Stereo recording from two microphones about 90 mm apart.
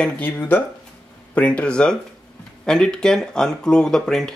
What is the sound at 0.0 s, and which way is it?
Speech, 15° left (ahead or behind).